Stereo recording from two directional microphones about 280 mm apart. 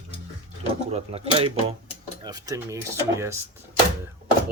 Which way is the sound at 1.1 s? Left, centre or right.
Centre.